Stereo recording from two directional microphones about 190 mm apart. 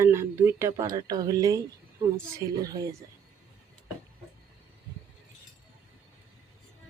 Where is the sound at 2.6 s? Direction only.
20° right (ahead or behind).